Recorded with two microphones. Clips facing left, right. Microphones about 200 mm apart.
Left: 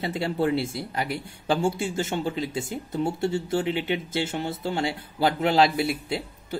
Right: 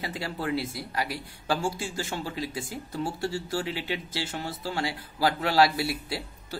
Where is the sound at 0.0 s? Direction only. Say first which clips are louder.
Left 7 dB; 25° left (ahead or behind).